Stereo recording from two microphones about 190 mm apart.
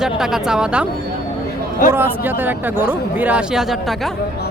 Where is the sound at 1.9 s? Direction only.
10° right (ahead or behind).